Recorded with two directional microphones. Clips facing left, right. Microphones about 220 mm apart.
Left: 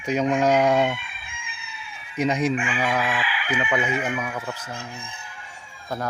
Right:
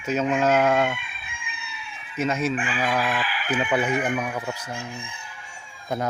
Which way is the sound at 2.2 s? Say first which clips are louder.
Left 2 dB; 15° left (ahead or behind).